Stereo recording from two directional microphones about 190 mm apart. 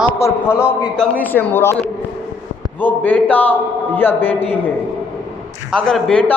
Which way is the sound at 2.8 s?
10° left (ahead or behind).